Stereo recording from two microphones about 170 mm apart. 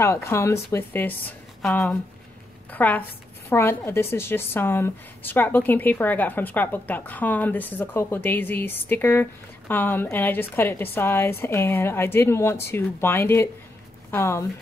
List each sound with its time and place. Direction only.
0.0 s a woman's voice: 15° left (ahead or behind)
1.6 s a woman's voice: 5° left (ahead or behind)